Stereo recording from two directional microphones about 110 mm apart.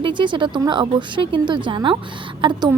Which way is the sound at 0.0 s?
45° right (ahead or behind).